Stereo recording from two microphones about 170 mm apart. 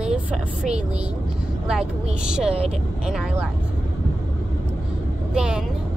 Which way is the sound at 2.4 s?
35° right (ahead or behind).